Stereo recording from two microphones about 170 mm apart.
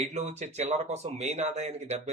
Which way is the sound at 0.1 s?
40° right (ahead or behind).